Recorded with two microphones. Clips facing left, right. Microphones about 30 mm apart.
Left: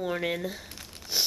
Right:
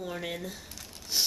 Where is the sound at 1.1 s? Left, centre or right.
Centre.